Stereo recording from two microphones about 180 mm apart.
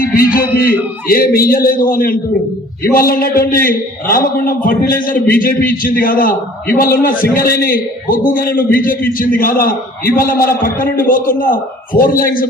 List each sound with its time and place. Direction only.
0.3 s a man's voice: 55° left (ahead or behind)